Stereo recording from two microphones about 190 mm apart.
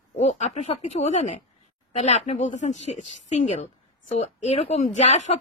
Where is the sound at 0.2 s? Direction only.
40° left (ahead or behind).